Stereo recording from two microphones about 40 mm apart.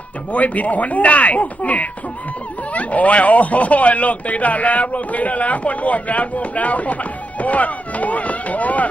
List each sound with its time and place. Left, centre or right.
0.3 s speech: left